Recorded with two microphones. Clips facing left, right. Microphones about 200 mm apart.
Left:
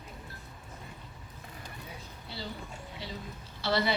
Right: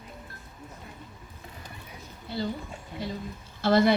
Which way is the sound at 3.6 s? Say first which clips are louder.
Right 8 dB; 50° right (ahead or behind).